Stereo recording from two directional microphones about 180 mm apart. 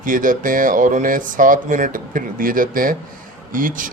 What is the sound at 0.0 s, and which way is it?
Speech, 50° right (ahead or behind).